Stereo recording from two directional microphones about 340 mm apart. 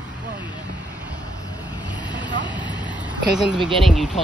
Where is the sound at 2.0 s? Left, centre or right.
Centre.